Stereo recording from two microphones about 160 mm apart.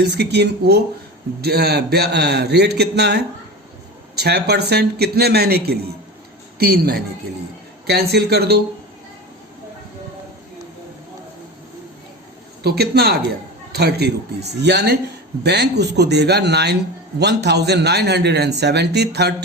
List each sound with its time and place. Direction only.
0.0 s a man's voice: 90° right
7.9 s a man's voice: 90° right
12.6 s a man's voice: 90° right